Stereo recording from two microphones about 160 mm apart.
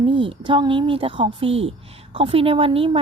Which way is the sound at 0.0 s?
30° right (ahead or behind).